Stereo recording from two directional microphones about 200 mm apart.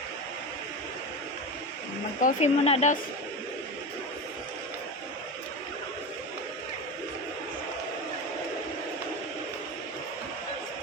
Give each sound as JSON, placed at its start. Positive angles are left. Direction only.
{"t": 2.2, "sound": "a woman's voice", "side_deg": 30}